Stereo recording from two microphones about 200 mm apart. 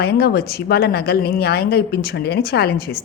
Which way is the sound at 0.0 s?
55° left (ahead or behind).